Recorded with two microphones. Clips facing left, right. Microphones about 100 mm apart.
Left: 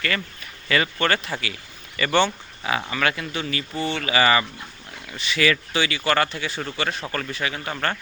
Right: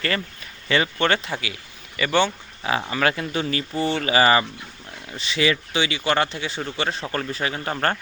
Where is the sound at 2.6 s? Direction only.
30° right (ahead or behind).